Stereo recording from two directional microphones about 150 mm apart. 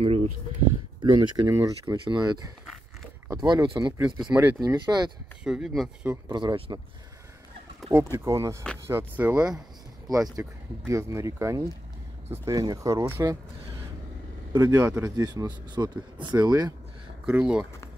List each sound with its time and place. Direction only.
1.1 s speech: 30° right (ahead or behind)
1.5 s speech: 20° right (ahead or behind)
4.0 s speech: 10° right (ahead or behind)
4.6 s speech: 25° right (ahead or behind)
5.4 s speech: 5° right (ahead or behind)
6.2 s speech: 30° right (ahead or behind)
7.9 s speech: 15° right (ahead or behind)
10.0 s speech: 25° right (ahead or behind)
14.5 s speech: 15° right (ahead or behind)
17.3 s speech: 10° right (ahead or behind)